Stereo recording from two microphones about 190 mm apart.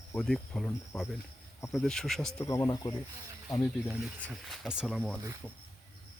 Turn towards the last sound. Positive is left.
turn(degrees=0)  # may be behind; listen again after turning